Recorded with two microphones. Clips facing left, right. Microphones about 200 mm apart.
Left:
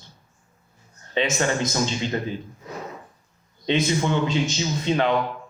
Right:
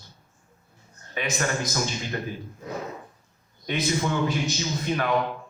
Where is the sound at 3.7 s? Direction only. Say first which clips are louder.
Left 4 dB; 25° left (ahead or behind).